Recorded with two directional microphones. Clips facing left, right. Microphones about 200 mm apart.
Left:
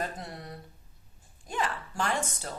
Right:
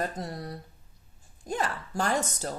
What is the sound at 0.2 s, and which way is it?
A woman's voice, 40° right (ahead or behind).